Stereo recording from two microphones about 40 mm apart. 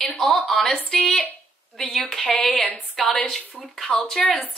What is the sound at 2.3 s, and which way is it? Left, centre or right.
Speech, left.